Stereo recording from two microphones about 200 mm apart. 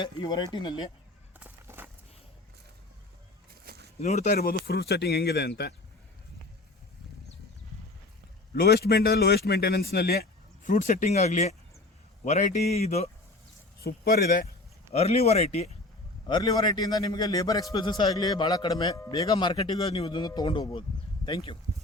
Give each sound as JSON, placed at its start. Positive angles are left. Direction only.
{"t": 0.0, "sound": "a man's voice", "side_deg": 20}
{"t": 1.4, "sound": "a sound", "side_deg": -10}
{"t": 3.5, "sound": "a sound", "side_deg": -50}
{"t": 4.0, "sound": "a man's voice", "side_deg": 35}
{"t": 8.5, "sound": "a man's voice", "side_deg": 50}
{"t": 13.8, "sound": "a man's voice", "side_deg": 50}
{"t": 14.9, "sound": "speech", "side_deg": 30}
{"t": 16.2, "sound": "a man's voice", "side_deg": 20}